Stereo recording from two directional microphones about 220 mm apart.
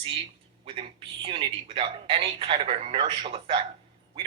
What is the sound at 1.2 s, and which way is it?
Speech, 25° right (ahead or behind).